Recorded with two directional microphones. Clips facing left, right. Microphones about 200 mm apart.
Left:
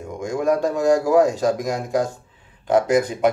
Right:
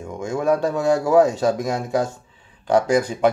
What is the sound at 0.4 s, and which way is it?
A man's voice, centre (ahead or behind).